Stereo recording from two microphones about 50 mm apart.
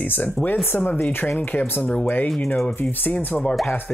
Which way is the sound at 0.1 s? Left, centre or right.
Left.